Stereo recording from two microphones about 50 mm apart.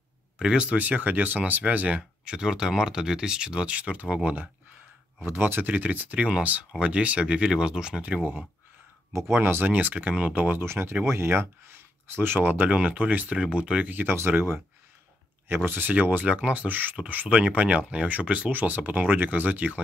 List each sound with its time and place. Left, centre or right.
0.4 s speech: centre
0.7 s speech: right
5.2 s speech: right
9.1 s speech: right
10.6 s speech: right
12.6 s speech: right
13.4 s speech: centre
13.8 s speech: right
15.4 s speech: right
15.9 s speech: right
16.6 s speech: right
18.5 s speech: right